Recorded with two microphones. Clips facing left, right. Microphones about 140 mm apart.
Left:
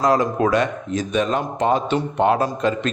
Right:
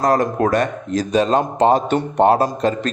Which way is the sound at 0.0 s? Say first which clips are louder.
Right 1 dB; 50° right (ahead or behind).